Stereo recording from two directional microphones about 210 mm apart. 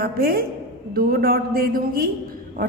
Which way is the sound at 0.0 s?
45° right (ahead or behind).